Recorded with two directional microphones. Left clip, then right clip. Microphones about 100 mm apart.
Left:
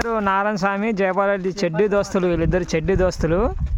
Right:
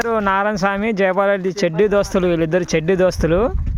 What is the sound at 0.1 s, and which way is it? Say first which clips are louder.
Speech: right 2 dB; 25° right (ahead or behind).